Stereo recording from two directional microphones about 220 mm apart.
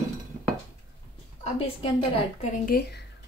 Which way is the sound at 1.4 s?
30° left (ahead or behind).